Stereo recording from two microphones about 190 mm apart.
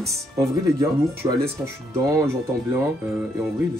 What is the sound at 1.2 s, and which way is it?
Speech, 20° right (ahead or behind).